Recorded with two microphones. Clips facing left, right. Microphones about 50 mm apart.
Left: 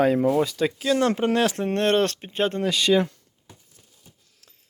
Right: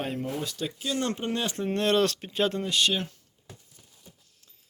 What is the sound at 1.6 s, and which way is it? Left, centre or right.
Speech, left.